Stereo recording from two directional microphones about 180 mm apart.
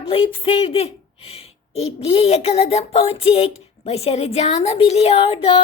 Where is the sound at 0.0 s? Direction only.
30° left (ahead or behind).